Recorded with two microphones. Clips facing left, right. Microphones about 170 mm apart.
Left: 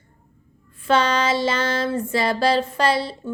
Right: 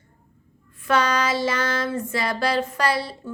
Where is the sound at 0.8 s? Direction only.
25° left (ahead or behind).